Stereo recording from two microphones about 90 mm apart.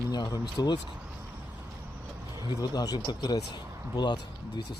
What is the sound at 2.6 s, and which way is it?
Speech, 45° left (ahead or behind).